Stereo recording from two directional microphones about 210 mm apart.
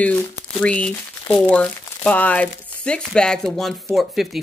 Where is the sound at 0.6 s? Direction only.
5° left (ahead or behind).